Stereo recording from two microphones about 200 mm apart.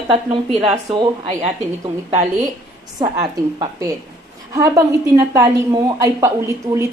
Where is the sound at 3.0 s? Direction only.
20° right (ahead or behind).